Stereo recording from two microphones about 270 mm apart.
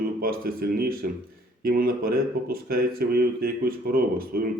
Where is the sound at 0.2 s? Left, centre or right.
Right.